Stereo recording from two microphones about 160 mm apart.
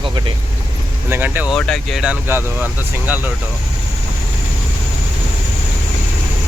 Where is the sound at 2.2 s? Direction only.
15° right (ahead or behind).